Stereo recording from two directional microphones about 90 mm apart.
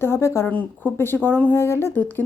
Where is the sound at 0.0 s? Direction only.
30° left (ahead or behind).